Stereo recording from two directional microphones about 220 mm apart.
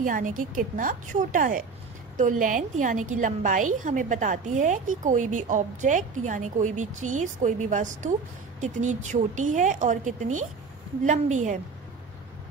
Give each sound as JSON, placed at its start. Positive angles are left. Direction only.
{"t": 0.0, "sound": "a woman's voice", "side_deg": -35}